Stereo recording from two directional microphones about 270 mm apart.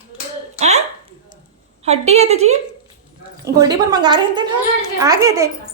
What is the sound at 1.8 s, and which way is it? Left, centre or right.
Speech, right.